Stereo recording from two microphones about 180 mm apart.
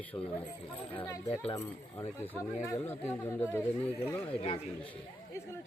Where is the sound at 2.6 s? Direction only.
10° left (ahead or behind).